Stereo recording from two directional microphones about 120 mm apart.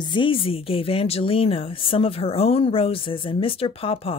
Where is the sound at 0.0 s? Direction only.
40° left (ahead or behind).